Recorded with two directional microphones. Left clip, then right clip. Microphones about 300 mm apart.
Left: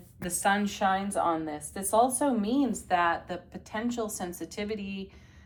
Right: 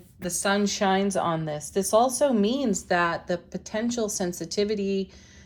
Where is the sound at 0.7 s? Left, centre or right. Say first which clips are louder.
Right 4 dB; right.